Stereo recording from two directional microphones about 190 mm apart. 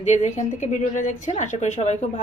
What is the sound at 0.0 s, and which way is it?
A woman's voice, 40° left (ahead or behind).